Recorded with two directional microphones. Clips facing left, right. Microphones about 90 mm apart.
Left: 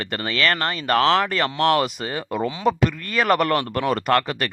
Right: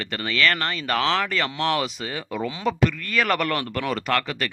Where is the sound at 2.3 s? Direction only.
30° left (ahead or behind).